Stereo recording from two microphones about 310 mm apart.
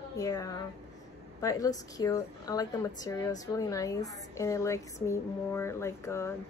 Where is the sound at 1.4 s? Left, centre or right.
Centre.